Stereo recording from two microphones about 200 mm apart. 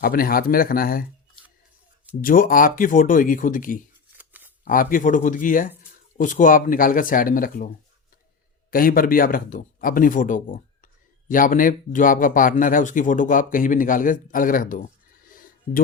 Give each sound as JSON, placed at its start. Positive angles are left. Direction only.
{"t": 0.0, "sound": "a man's voice", "side_deg": 45}
{"t": 2.2, "sound": "a man's voice", "side_deg": 45}
{"t": 4.2, "sound": "a sound", "side_deg": -10}
{"t": 4.6, "sound": "a man's voice", "side_deg": 45}
{"t": 8.7, "sound": "a man's voice", "side_deg": 45}
{"t": 15.3, "sound": "a sound", "side_deg": 45}